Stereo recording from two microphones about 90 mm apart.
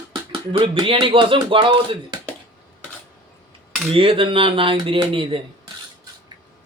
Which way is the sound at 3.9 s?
85° right.